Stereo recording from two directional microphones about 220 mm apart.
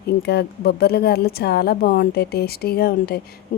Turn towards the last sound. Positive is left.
turn(degrees=45)  # may be behind; listen again after turning